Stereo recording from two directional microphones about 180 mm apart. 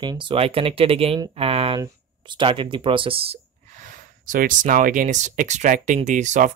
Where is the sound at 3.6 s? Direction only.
45° right (ahead or behind).